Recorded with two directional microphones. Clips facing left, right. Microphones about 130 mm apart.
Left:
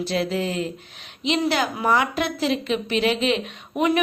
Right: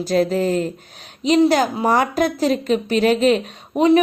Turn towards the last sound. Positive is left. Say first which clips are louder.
# right 7 dB
turn(degrees=-35)  # may be behind; listen again after turning